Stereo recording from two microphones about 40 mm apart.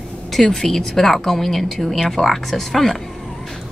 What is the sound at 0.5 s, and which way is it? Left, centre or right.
Speech, centre.